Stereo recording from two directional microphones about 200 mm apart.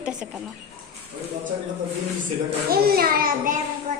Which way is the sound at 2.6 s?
50° right (ahead or behind).